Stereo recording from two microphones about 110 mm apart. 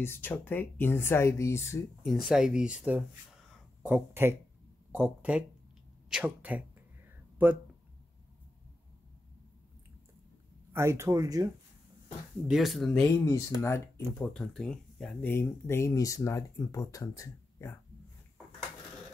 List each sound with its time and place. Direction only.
0.0 s speech: 20° left (ahead or behind)
2.2 s speech: 5° right (ahead or behind)
10.7 s speech: 25° right (ahead or behind)
12.4 s speech: centre (ahead or behind)
13.1 s speech: 25° left (ahead or behind)
14.1 s speech: 10° left (ahead or behind)
15.2 s speech: 20° left (ahead or behind)